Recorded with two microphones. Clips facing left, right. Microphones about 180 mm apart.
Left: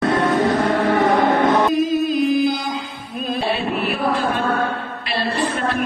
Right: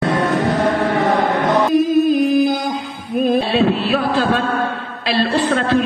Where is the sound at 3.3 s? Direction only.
90° right.